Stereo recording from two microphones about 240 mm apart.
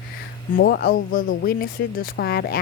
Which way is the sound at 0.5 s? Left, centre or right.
Left.